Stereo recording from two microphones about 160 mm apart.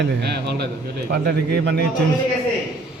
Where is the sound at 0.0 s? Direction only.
90° right.